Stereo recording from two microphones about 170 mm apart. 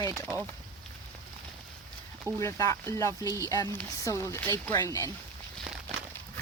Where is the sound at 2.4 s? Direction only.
20° left (ahead or behind).